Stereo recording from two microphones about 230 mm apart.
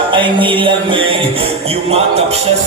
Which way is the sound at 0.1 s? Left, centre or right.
Right.